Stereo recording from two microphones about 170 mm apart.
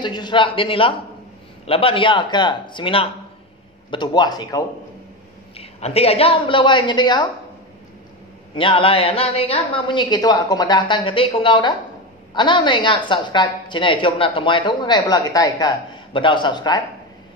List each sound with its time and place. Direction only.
0.0 s a woman's voice: 25° left (ahead or behind)
5.6 s a woman's voice: 35° left (ahead or behind)
8.5 s a woman's voice: 30° left (ahead or behind)